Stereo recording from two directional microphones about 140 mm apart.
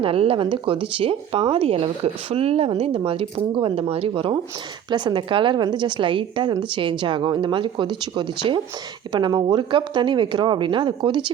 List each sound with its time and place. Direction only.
0.0 s speech: 40° right (ahead or behind)